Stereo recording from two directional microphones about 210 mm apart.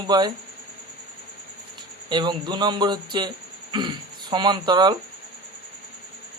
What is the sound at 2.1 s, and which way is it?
Speech, 20° right (ahead or behind).